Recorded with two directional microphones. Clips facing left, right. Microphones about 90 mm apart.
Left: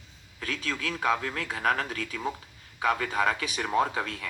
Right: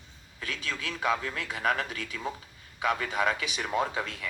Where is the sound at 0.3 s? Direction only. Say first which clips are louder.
Left 3 dB; 40° left (ahead or behind).